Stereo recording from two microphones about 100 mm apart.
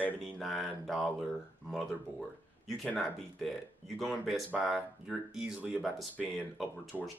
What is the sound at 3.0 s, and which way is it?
Speech, centre (ahead or behind).